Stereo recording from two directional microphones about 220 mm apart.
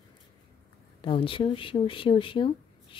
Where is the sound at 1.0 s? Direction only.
25° left (ahead or behind).